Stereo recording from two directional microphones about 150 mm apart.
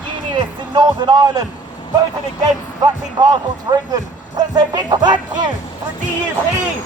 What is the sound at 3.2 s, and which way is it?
Speech, 25° right (ahead or behind).